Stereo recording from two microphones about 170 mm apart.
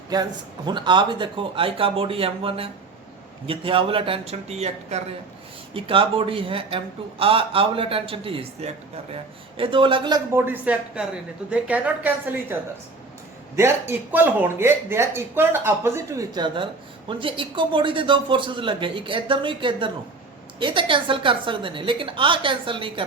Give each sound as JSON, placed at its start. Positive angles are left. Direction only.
{"t": 0.1, "sound": "a man's voice", "side_deg": -25}
{"t": 10.3, "sound": "speech", "side_deg": -10}
{"t": 13.6, "sound": "a man's voice", "side_deg": -15}